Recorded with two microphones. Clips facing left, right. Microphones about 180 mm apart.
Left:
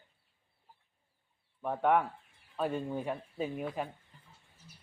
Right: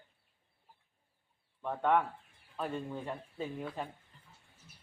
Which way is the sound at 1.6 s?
10° left (ahead or behind).